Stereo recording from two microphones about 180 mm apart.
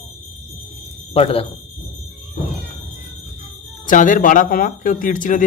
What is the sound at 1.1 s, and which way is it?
Speech, 35° left (ahead or behind).